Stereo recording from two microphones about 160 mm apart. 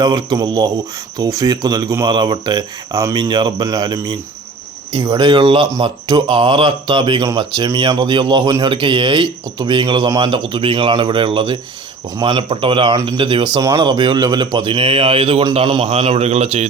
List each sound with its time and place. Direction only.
0.0 s speech: 25° right (ahead or behind)
15.9 s speech: 40° right (ahead or behind)